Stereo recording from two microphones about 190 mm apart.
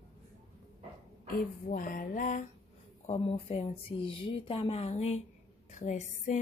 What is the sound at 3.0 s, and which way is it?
A woman's voice, 30° left (ahead or behind).